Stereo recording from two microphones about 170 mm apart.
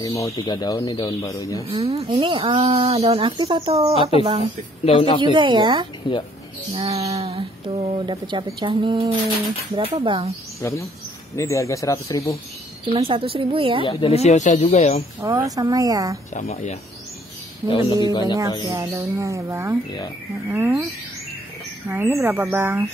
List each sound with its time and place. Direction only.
0.0 s speech: 20° left (ahead or behind)
1.7 s speech: 35° right (ahead or behind)
4.8 s speech: 35° left (ahead or behind)
5.2 s speech: 30° right (ahead or behind)
10.6 s speech: 15° left (ahead or behind)
12.8 s speech: 30° right (ahead or behind)
13.8 s speech: 30° left (ahead or behind)
15.1 s speech: 15° right (ahead or behind)
16.3 s speech: 40° left (ahead or behind)
17.6 s speech: 30° left (ahead or behind)
18.7 s speech: 20° right (ahead or behind)
21.8 s speech: 15° right (ahead or behind)